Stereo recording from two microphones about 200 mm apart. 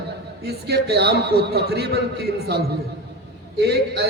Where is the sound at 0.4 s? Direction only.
55° right (ahead or behind).